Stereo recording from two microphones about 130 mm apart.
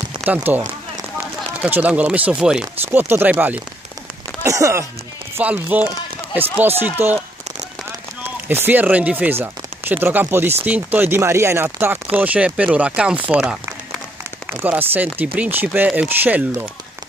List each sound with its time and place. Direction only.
0.2 s speech: 15° right (ahead or behind)
4.4 s speech: 25° right (ahead or behind)
5.4 s speech: 10° right (ahead or behind)
8.5 s speech: 15° right (ahead or behind)
14.6 s speech: 15° right (ahead or behind)